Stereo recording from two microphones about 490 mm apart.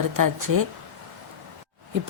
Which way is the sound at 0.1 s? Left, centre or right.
Right.